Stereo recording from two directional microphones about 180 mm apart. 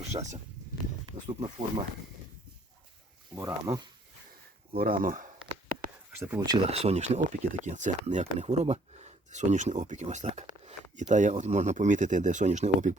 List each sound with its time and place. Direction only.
0.0 s speech: 40° right (ahead or behind)
3.3 s speech: 20° right (ahead or behind)
4.8 s speech: 50° right (ahead or behind)
6.1 s speech: 10° right (ahead or behind)
6.7 s speech: 35° right (ahead or behind)